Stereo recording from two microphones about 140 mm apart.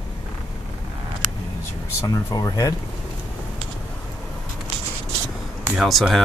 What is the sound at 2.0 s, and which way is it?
Speech, 25° left (ahead or behind).